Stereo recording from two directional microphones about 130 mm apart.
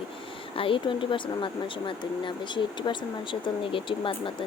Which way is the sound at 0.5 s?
45° left (ahead or behind).